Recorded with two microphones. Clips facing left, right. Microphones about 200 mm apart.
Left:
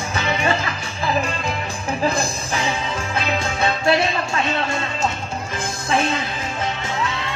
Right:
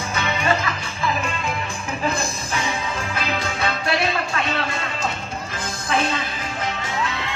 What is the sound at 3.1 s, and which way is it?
Music, 25° left (ahead or behind).